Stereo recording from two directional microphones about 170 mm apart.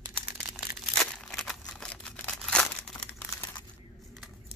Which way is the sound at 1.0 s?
Centre (ahead or behind).